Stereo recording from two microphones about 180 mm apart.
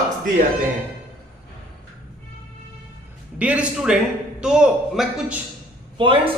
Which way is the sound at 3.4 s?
5° right (ahead or behind).